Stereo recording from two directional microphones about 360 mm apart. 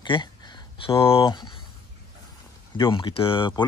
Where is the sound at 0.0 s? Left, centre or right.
Centre.